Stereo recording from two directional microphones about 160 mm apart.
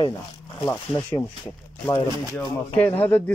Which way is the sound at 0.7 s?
20° left (ahead or behind).